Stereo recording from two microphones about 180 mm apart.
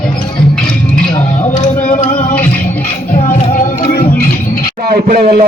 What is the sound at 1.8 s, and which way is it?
Music, 45° left (ahead or behind).